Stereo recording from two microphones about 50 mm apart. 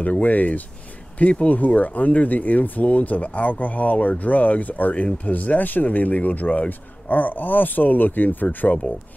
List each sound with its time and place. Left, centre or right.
0.0 s speech: left